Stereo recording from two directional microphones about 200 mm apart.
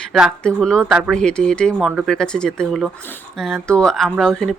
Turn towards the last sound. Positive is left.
turn(degrees=0)  # may be behind; listen again after turning